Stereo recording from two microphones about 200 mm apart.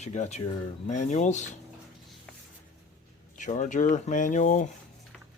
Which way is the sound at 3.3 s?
40° left (ahead or behind).